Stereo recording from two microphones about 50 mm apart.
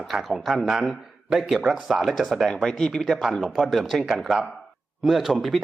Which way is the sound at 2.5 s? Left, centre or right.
Centre.